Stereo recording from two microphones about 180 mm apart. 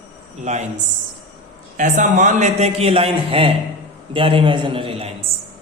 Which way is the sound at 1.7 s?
45° right (ahead or behind).